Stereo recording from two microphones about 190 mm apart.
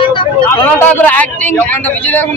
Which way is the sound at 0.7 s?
10° left (ahead or behind).